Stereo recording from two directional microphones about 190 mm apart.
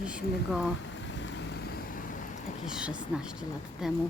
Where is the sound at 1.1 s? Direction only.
75° left (ahead or behind).